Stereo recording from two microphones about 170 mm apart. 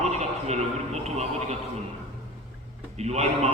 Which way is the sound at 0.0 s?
40° right (ahead or behind).